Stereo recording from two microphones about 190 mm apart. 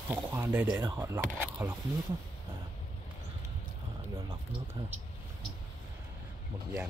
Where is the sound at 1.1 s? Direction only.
10° right (ahead or behind).